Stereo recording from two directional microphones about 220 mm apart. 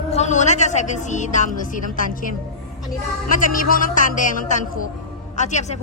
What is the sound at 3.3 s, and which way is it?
A woman's voice, 40° left (ahead or behind).